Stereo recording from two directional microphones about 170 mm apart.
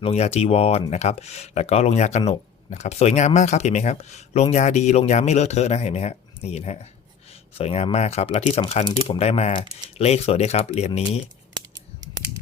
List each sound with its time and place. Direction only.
0.0 s speech: 40° left (ahead or behind)